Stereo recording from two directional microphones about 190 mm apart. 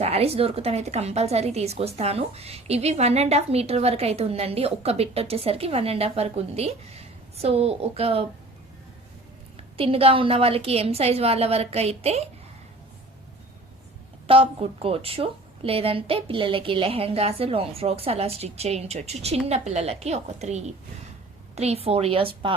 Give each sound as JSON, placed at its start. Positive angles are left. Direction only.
{"t": 0.0, "sound": "a woman's voice", "side_deg": -30}
{"t": 9.7, "sound": "a woman's voice", "side_deg": -30}
{"t": 14.3, "sound": "a woman's voice", "side_deg": -30}